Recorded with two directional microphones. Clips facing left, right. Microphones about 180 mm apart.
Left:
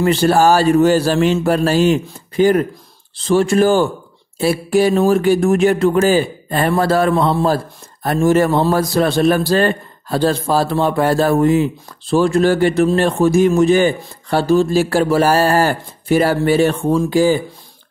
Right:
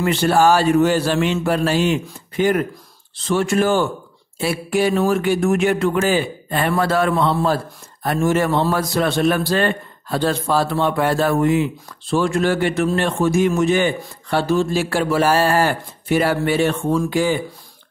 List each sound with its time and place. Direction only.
0.0 s a man's voice: 35° left (ahead or behind)